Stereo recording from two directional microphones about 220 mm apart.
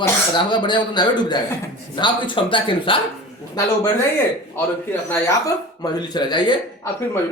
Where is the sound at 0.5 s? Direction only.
20° left (ahead or behind).